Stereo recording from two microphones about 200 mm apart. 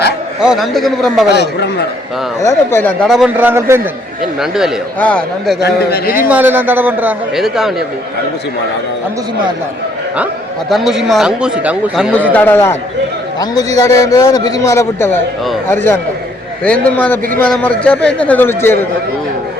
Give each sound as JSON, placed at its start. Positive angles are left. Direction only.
{"t": 0.3, "sound": "a man's voice", "side_deg": 0}
{"t": 1.3, "sound": "speech", "side_deg": 60}
{"t": 2.4, "sound": "a man's voice", "side_deg": 15}
{"t": 5.6, "sound": "a man's voice", "side_deg": 50}
{"t": 6.2, "sound": "a man's voice", "side_deg": -10}
{"t": 10.7, "sound": "a man's voice", "side_deg": 0}
{"t": 12.3, "sound": "a man's voice", "side_deg": 10}
{"t": 17.4, "sound": "a man's voice", "side_deg": 5}